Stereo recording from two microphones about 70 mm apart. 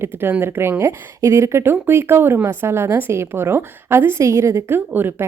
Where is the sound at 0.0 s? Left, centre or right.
Right.